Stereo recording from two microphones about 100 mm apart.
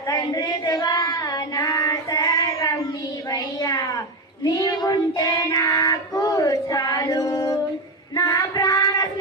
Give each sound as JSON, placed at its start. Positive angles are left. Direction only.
{"t": 0.1, "sound": "child singing", "side_deg": 40}